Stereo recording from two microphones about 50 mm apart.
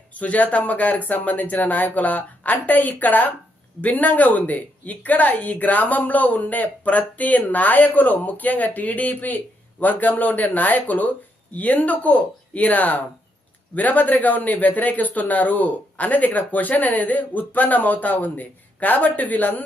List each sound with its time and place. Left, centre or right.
0.1 s speech: left